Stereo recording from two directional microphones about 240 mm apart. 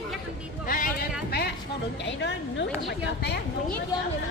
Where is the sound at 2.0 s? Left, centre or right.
Left.